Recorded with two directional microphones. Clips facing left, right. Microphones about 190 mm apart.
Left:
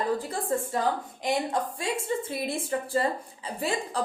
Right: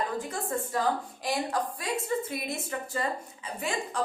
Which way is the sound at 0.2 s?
35° left (ahead or behind).